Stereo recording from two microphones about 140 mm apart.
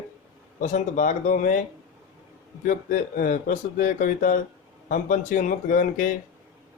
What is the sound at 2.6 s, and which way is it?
Speech, 70° left (ahead or behind).